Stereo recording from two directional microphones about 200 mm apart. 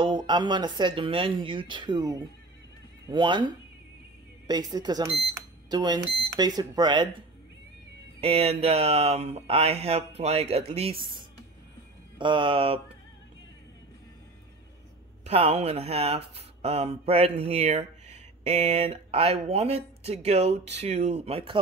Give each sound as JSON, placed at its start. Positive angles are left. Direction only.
{"t": 0.0, "sound": "speech", "side_deg": -25}
{"t": 8.2, "sound": "speech", "side_deg": -30}
{"t": 12.2, "sound": "speech", "side_deg": -25}
{"t": 15.2, "sound": "speech", "side_deg": -30}